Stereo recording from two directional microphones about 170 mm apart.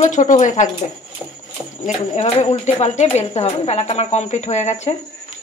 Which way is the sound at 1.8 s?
40° left (ahead or behind).